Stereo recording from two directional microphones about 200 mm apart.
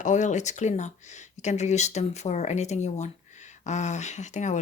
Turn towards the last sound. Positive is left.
turn(degrees=35)  # may be behind; listen again after turning